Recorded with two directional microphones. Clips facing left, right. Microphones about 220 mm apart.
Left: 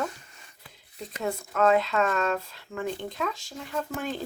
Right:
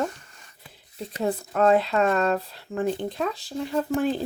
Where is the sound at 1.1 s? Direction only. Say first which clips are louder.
Right 4 dB; 35° right (ahead or behind).